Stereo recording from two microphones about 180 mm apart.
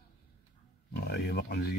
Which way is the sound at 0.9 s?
65° left (ahead or behind).